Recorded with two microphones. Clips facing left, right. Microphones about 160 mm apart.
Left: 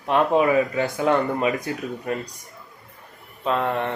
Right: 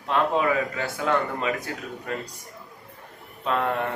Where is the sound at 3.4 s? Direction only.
Centre (ahead or behind).